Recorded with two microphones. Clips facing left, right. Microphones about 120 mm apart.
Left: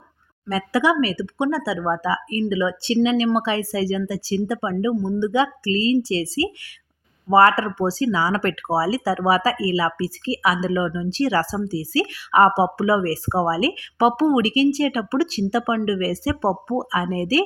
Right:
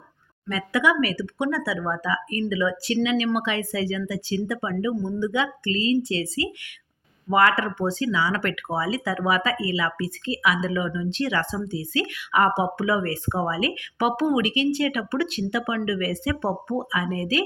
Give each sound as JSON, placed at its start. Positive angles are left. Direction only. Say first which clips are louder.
{"t": 0.4, "sound": "speech", "louder": "left 3 dB", "side_deg": 35}